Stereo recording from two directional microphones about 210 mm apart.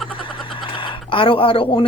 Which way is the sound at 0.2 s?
25° left (ahead or behind).